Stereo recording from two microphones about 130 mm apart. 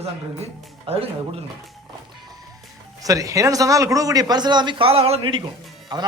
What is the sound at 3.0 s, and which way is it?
A man's voice, 25° right (ahead or behind).